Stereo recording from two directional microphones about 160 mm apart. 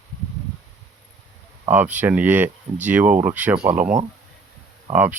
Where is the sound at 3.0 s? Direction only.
55° right (ahead or behind).